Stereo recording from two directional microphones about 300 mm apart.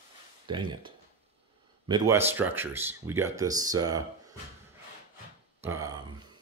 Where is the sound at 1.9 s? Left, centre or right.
Centre.